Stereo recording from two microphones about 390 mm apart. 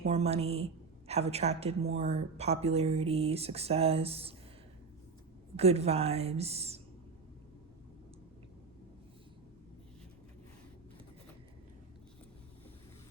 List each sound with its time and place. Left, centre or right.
0.0 s a woman's voice: centre
5.5 s speech: centre